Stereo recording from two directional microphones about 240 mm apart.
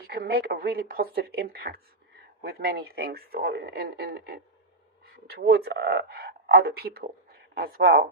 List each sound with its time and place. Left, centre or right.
0.1 s speech: right